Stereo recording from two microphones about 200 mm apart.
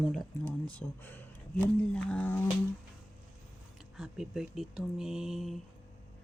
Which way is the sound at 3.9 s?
Centre (ahead or behind).